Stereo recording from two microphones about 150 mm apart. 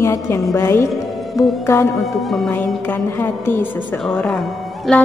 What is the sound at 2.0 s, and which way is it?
Music, centre (ahead or behind).